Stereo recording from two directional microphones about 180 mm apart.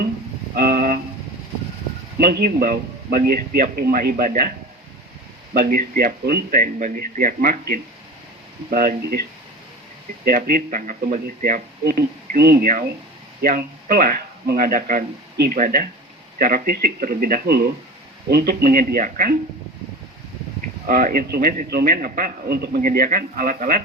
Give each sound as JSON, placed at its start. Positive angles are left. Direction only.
{"t": 0.5, "sound": "vehicle", "side_deg": -55}
{"t": 2.1, "sound": "a man's voice", "side_deg": -60}
{"t": 5.5, "sound": "a man's voice", "side_deg": -55}
{"t": 10.2, "sound": "a man's voice", "side_deg": -55}
{"t": 20.8, "sound": "a man's voice", "side_deg": -50}